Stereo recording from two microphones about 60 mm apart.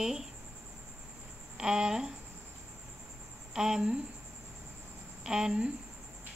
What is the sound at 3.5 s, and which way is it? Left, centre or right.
Speech, centre.